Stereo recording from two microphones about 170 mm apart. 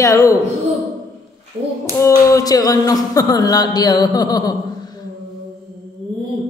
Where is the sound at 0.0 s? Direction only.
20° left (ahead or behind).